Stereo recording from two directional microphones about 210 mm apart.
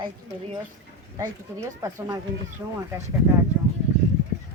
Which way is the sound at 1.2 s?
15° right (ahead or behind).